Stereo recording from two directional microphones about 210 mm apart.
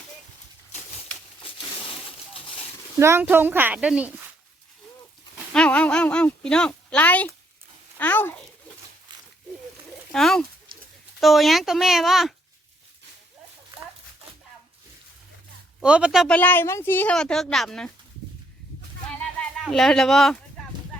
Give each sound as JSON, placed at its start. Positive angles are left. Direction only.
{"t": 0.7, "sound": "a sound", "side_deg": 30}
{"t": 3.0, "sound": "a woman's voice", "side_deg": -10}
{"t": 5.5, "sound": "a child's voice", "side_deg": 5}
{"t": 10.1, "sound": "a woman's voice", "side_deg": 0}
{"t": 15.8, "sound": "a woman's voice", "side_deg": -5}
{"t": 19.2, "sound": "a sound", "side_deg": 5}